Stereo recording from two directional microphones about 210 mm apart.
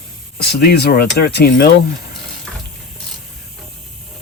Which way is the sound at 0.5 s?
50° left (ahead or behind).